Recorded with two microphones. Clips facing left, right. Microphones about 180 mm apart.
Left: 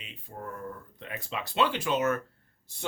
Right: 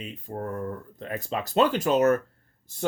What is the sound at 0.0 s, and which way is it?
Speech, 45° right (ahead or behind).